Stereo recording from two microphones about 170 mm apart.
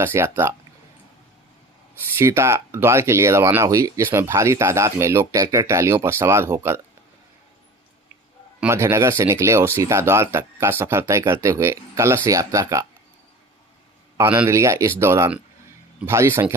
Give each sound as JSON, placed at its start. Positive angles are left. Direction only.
{"t": 0.0, "sound": "speech", "side_deg": -15}
{"t": 2.1, "sound": "speech", "side_deg": -15}
{"t": 8.6, "sound": "speech", "side_deg": -15}
{"t": 14.2, "sound": "speech", "side_deg": -10}